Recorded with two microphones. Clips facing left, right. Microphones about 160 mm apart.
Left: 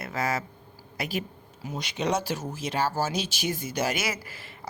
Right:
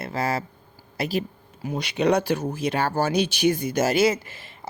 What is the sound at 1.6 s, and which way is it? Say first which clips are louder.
Speech: right 7 dB; 65° right (ahead or behind).